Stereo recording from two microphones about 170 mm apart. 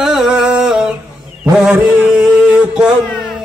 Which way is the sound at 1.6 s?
5° right (ahead or behind).